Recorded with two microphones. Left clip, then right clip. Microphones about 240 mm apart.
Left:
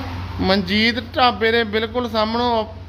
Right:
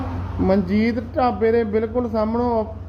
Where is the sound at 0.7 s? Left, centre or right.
Left.